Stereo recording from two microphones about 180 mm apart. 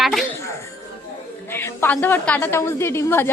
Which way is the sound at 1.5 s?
15° left (ahead or behind).